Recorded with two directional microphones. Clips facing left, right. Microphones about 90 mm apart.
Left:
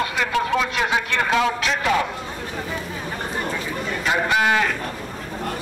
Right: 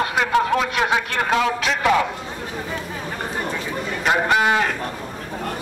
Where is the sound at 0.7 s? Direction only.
60° right (ahead or behind).